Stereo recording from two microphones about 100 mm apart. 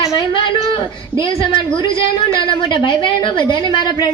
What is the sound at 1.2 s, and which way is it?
A woman's voice, 60° left (ahead or behind).